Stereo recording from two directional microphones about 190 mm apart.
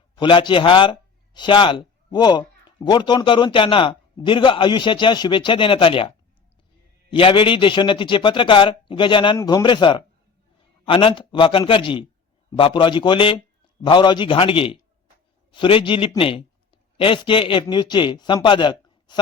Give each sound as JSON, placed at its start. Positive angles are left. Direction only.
{"t": 0.2, "sound": "a man's voice", "side_deg": 25}